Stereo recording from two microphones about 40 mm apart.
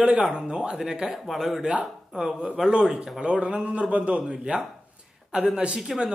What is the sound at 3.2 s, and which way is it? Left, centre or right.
A man's voice, right.